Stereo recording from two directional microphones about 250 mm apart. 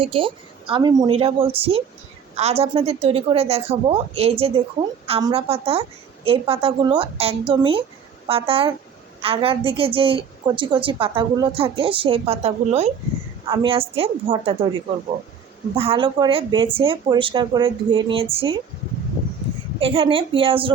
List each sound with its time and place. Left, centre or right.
0.0 s a woman's voice: right
19.8 s a woman's voice: right